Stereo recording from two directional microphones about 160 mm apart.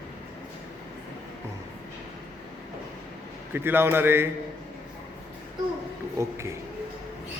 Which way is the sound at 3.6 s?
15° right (ahead or behind).